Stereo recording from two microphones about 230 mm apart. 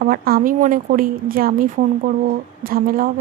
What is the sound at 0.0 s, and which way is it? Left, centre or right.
Speech, right.